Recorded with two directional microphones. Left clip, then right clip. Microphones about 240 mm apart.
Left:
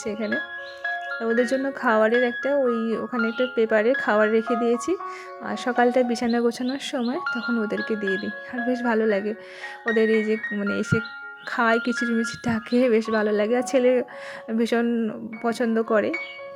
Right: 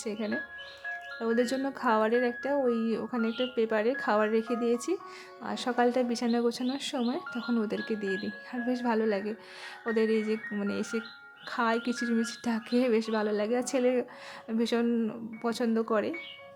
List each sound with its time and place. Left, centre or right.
0.0 s speech: centre